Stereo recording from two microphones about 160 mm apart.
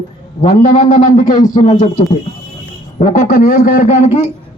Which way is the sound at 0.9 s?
55° left (ahead or behind).